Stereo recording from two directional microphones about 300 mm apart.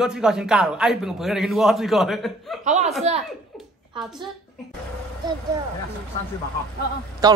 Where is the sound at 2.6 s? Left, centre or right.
Right.